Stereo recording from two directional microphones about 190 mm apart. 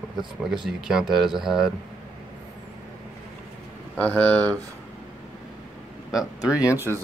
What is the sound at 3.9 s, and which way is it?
Speech, 5° left (ahead or behind).